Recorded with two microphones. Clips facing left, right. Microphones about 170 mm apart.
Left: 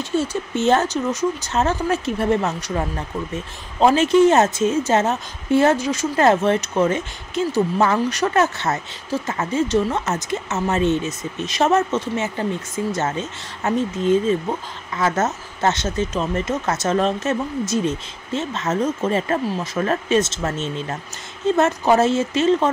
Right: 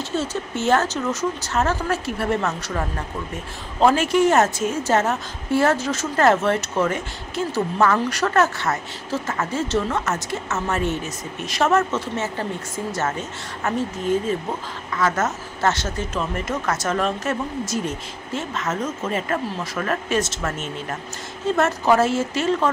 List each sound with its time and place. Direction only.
0.1 s a woman's voice: 15° left (ahead or behind)
3.8 s a woman's voice: 20° left (ahead or behind)